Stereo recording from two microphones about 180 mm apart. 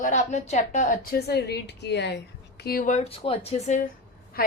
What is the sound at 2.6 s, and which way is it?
A woman's voice, 55° left (ahead or behind).